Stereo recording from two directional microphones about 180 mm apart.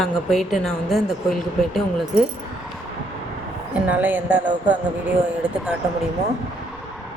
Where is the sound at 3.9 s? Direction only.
10° right (ahead or behind).